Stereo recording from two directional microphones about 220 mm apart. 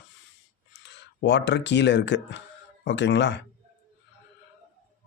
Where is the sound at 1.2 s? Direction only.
50° left (ahead or behind).